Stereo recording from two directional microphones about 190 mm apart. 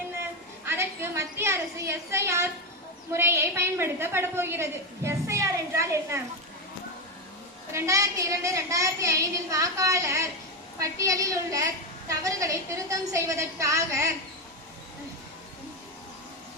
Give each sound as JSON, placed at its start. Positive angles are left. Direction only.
{"t": 0.6, "sound": "a sound", "side_deg": -10}
{"t": 3.1, "sound": "a woman's voice", "side_deg": -15}
{"t": 7.7, "sound": "a woman's voice", "side_deg": -15}